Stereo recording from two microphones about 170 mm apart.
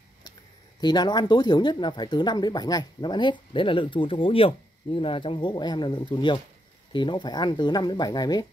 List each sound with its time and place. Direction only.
0.7 s speech: 25° left (ahead or behind)